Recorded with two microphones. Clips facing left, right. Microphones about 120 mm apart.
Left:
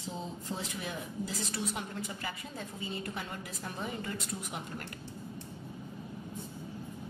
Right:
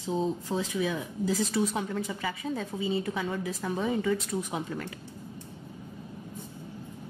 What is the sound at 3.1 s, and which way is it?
Speech, 90° right.